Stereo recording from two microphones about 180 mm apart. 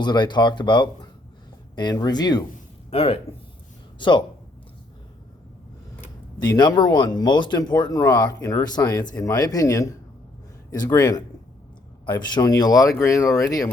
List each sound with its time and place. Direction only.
0.0 s speech: 25° left (ahead or behind)
2.9 s speech: 30° left (ahead or behind)
6.4 s speech: 20° left (ahead or behind)
12.2 s speech: 20° left (ahead or behind)